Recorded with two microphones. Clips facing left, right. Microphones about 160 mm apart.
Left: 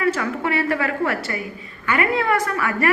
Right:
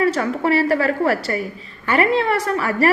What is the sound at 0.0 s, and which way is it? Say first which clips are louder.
A woman's voice: right 3 dB; 35° right (ahead or behind).